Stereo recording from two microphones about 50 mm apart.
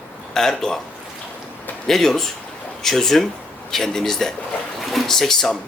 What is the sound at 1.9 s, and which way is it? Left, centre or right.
Speech, centre.